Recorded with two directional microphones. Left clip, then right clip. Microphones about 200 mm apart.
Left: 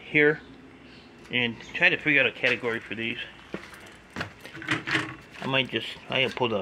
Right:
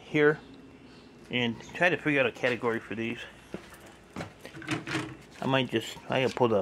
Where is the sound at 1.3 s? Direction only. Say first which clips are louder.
Left 4 dB; 25° right (ahead or behind).